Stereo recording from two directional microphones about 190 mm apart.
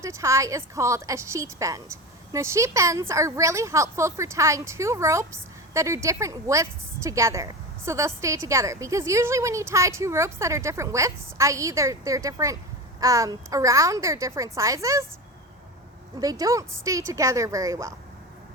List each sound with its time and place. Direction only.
0.0 s a woman's voice: 15° right (ahead or behind)
16.2 s a woman's voice: 20° right (ahead or behind)